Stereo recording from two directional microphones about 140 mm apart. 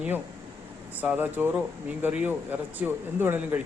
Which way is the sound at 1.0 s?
15° right (ahead or behind).